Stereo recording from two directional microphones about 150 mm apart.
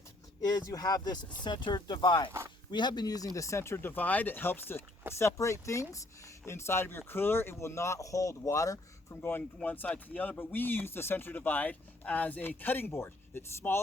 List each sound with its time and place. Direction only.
0.4 s speech: 25° left (ahead or behind)